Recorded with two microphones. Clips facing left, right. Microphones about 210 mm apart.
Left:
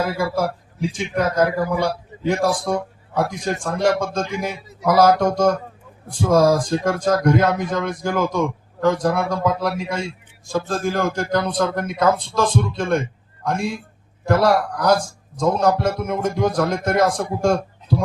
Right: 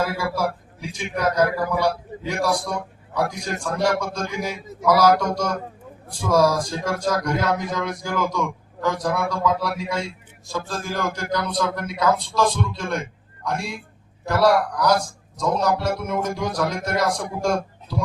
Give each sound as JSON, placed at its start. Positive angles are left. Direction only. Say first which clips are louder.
{"t": 0.2, "sound": "a man's voice", "louder": "left 3 dB", "side_deg": 55}